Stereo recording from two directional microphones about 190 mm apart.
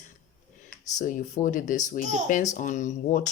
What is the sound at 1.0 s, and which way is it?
Speech, 45° left (ahead or behind).